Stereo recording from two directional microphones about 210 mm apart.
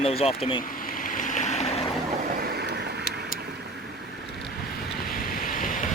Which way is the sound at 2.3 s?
50° right (ahead or behind).